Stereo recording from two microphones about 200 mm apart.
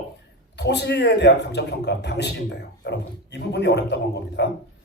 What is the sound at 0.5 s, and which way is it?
A man's voice, 60° left (ahead or behind).